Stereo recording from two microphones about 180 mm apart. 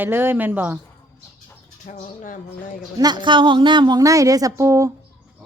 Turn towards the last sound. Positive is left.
turn(degrees=-15)  # may be behind; listen again after turning